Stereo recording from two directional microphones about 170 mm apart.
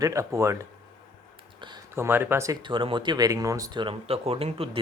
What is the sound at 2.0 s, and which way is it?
Speech, 10° right (ahead or behind).